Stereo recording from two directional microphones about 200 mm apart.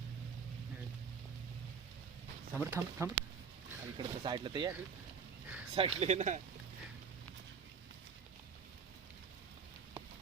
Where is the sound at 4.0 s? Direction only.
25° right (ahead or behind).